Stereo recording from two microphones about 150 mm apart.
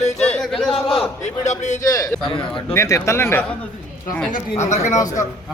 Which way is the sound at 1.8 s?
20° left (ahead or behind).